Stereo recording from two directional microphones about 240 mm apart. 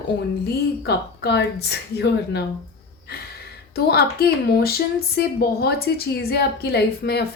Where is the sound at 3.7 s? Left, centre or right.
Left.